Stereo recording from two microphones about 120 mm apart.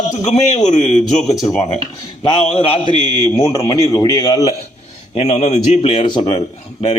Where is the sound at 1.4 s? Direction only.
30° left (ahead or behind).